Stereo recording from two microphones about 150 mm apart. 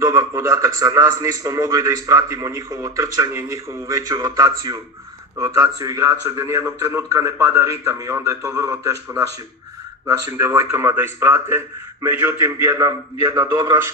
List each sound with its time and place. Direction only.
0.0 s a man's voice: 20° right (ahead or behind)